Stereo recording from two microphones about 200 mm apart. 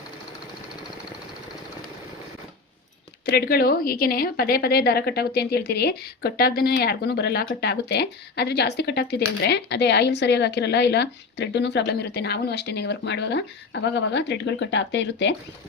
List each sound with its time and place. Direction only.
3.2 s a woman's voice: 50° left (ahead or behind)